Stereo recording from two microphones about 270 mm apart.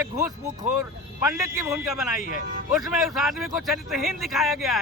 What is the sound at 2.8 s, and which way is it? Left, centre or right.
Speech, centre.